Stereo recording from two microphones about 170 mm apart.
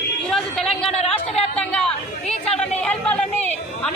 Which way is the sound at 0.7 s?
35° left (ahead or behind).